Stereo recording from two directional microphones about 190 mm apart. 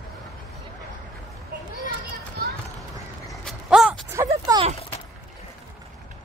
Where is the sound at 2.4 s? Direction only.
55° right (ahead or behind).